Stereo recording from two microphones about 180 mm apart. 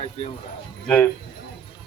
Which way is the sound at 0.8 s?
5° left (ahead or behind).